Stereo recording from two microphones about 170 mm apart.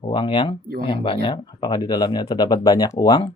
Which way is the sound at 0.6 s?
60° right (ahead or behind).